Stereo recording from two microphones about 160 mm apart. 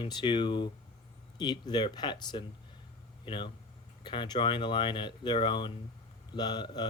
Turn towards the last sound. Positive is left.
turn(degrees=25)  # may be behind; listen again after turning